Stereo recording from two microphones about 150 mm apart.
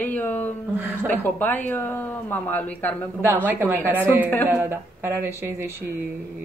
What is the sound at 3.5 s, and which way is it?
Speech, 15° right (ahead or behind).